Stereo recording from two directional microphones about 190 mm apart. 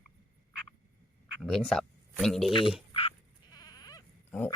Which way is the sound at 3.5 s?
20° left (ahead or behind).